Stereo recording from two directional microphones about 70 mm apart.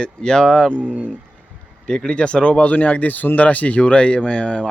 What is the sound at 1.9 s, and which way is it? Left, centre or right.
Speech, centre.